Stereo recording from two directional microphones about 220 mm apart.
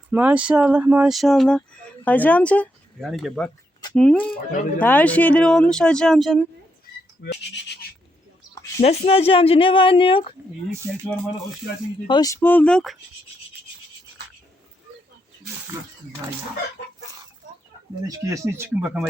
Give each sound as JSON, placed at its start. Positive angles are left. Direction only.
{"t": 0.1, "sound": "speech", "side_deg": -5}
{"t": 7.2, "sound": "speech", "side_deg": 50}
{"t": 8.8, "sound": "speech", "side_deg": 30}
{"t": 12.0, "sound": "speech", "side_deg": 20}
{"t": 18.0, "sound": "speech", "side_deg": -15}